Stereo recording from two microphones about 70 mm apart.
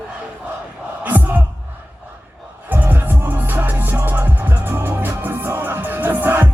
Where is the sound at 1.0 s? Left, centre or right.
Right.